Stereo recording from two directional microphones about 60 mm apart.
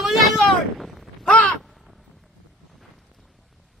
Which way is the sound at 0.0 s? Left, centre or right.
Centre.